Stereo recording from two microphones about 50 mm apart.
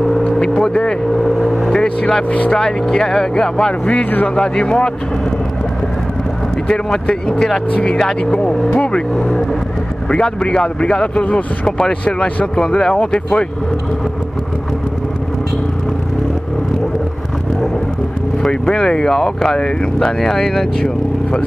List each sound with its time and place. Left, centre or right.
0.4 s vehicle: centre
1.7 s speech: centre
2.2 s speech: left
2.6 s speech: centre
6.7 s speech: centre
18.5 s speech: centre